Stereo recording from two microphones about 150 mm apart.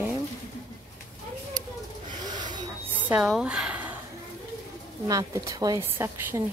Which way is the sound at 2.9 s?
10° right (ahead or behind).